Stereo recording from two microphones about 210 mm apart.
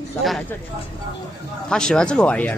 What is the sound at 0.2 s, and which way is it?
Speech, centre (ahead or behind).